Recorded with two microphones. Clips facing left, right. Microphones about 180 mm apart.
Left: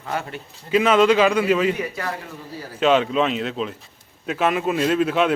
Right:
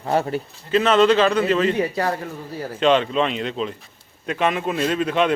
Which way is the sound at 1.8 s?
35° right (ahead or behind).